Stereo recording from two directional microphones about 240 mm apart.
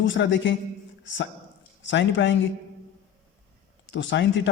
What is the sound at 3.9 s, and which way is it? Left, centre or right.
Speech, left.